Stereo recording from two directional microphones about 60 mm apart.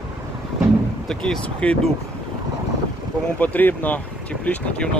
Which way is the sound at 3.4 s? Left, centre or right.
Left.